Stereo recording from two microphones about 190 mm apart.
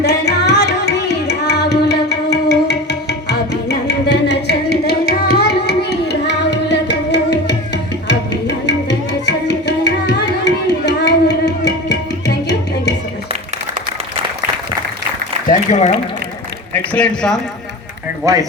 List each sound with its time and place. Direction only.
0.0 s music: 60° left (ahead or behind)
8.0 s tabla: 65° left (ahead or behind)
15.4 s a sound: 35° left (ahead or behind)
16.7 s speech: 5° left (ahead or behind)
18.2 s speech: 15° right (ahead or behind)